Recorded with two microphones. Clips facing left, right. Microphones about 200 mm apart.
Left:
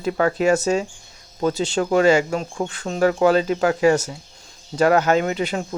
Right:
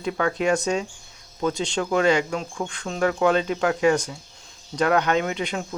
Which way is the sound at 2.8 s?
40° left (ahead or behind).